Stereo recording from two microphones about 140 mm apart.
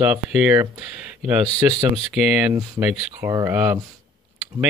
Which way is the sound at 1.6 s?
10° right (ahead or behind).